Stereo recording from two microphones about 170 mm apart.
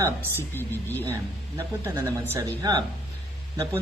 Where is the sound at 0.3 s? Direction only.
10° left (ahead or behind).